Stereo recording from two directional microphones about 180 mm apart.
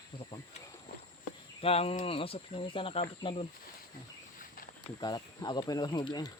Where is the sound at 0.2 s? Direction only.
30° left (ahead or behind).